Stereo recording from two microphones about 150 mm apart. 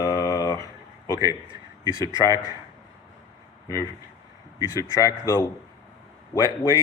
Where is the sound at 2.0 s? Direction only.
25° right (ahead or behind).